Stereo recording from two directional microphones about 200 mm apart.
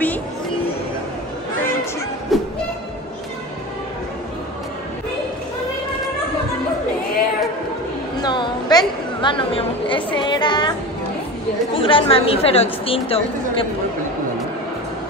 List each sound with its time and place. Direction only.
2.3 s music: centre (ahead or behind)
8.2 s a sound: 20° left (ahead or behind)
11.7 s a woman's voice: 25° left (ahead or behind)